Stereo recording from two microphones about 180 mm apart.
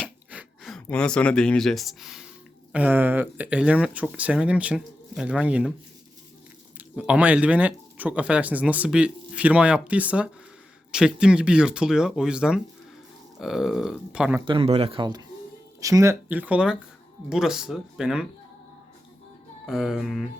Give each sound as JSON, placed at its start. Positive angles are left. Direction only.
{"t": 0.3, "sound": "a sound", "side_deg": -5}
{"t": 0.9, "sound": "speech", "side_deg": 5}
{"t": 6.7, "sound": "speech", "side_deg": -5}
{"t": 14.4, "sound": "speech", "side_deg": -30}
{"t": 19.6, "sound": "speech", "side_deg": 0}